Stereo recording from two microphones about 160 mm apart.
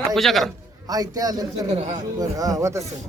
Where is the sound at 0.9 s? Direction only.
25° right (ahead or behind).